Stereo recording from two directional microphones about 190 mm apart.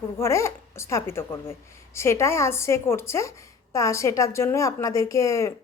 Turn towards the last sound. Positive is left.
turn(degrees=15)  # may be behind; listen again after turning